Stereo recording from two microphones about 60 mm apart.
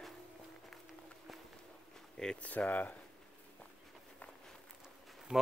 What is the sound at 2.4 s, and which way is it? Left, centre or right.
Speech, left.